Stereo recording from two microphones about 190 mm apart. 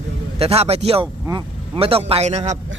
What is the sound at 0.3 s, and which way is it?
Speech, 30° right (ahead or behind).